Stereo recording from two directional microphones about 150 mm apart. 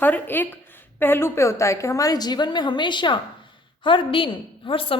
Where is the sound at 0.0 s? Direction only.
10° left (ahead or behind).